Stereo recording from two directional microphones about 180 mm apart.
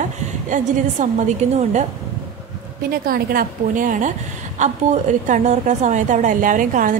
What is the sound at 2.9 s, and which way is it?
A woman's voice, 55° right (ahead or behind).